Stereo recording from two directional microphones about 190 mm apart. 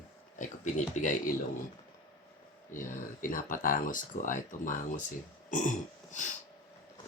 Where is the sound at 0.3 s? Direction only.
40° left (ahead or behind).